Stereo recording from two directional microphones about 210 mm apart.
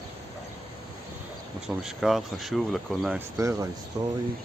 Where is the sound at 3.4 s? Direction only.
15° right (ahead or behind).